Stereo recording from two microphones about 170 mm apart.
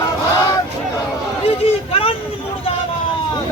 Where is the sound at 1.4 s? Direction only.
35° left (ahead or behind).